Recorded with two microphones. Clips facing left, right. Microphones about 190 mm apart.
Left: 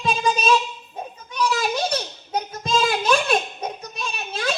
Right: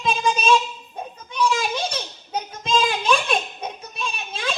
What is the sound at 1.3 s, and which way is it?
Children playing, 40° left (ahead or behind).